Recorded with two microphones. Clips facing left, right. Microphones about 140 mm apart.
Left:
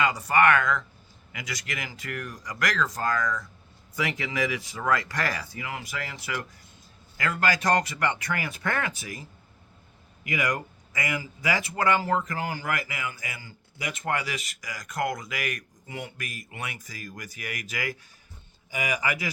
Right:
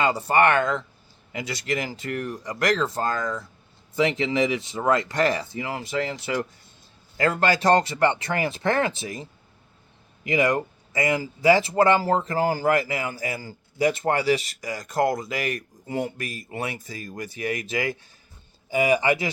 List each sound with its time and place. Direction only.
0.0 s speech: 30° right (ahead or behind)
10.2 s speech: 30° right (ahead or behind)